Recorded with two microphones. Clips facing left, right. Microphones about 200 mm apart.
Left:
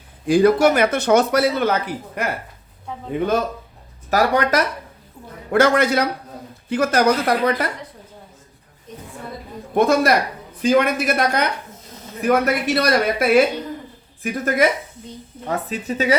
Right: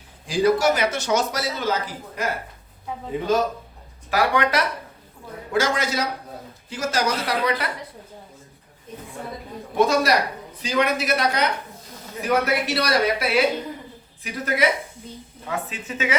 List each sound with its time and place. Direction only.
0.3 s speech: 55° left (ahead or behind)
4.1 s speech: 40° left (ahead or behind)
5.5 s speech: 60° left (ahead or behind)
9.7 s a man's voice: 55° left (ahead or behind)
15.4 s speech: 40° left (ahead or behind)